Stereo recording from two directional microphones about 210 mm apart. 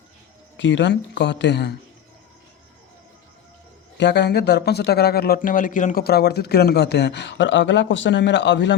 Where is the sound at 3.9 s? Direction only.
55° left (ahead or behind).